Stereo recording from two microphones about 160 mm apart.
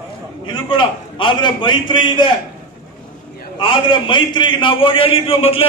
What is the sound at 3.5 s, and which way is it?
A man's voice, 30° left (ahead or behind).